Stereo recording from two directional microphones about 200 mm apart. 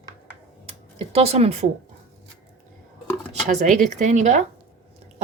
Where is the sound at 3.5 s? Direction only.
40° right (ahead or behind).